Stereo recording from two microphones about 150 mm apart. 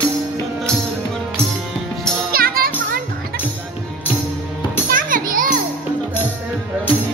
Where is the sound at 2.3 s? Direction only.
80° right.